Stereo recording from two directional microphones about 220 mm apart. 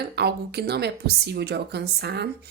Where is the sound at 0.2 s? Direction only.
50° right (ahead or behind).